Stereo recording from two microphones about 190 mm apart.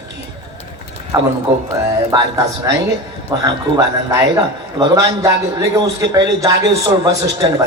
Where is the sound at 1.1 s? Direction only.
20° right (ahead or behind).